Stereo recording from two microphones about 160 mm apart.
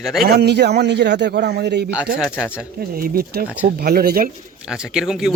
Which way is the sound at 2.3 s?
10° left (ahead or behind).